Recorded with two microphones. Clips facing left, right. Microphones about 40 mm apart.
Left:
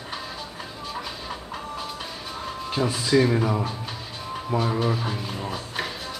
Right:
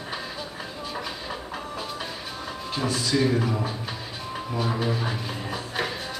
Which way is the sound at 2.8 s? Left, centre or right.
Centre.